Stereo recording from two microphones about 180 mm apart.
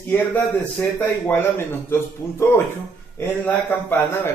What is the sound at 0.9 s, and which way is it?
A man's voice, 10° left (ahead or behind).